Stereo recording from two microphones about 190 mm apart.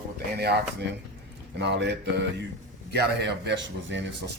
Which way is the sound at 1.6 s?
65° right (ahead or behind).